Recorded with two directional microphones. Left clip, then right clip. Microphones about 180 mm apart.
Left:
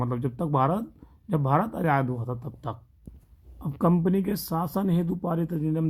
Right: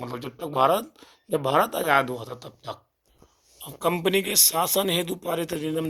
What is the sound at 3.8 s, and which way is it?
Speech, 30° right (ahead or behind).